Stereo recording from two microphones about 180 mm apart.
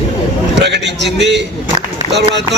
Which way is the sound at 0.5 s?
75° right (ahead or behind).